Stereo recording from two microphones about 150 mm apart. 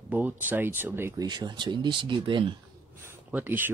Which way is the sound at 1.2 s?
30° right (ahead or behind).